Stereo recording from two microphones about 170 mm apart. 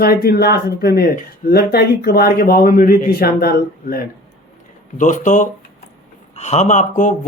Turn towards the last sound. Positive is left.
turn(degrees=45)  # may be behind; listen again after turning